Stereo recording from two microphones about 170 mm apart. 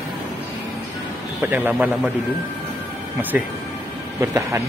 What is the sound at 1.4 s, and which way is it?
Speech, 10° right (ahead or behind).